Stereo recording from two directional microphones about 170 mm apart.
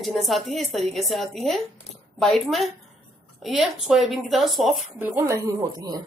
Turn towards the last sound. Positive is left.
turn(degrees=-20)  # may be behind; listen again after turning